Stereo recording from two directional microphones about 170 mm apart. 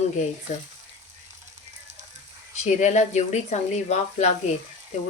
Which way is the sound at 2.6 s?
45° left (ahead or behind).